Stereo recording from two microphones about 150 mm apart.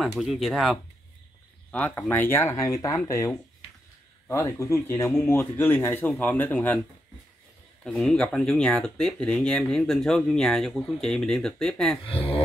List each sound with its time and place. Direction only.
0.2 s speech: centre (ahead or behind); by 6.0 s 15° left (ahead or behind)
6.0 s speech: 5° left (ahead or behind)
7.8 s speech: centre (ahead or behind)
12.1 s speech: 40° left (ahead or behind)